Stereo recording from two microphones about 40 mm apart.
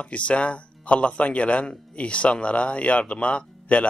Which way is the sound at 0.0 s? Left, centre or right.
Left.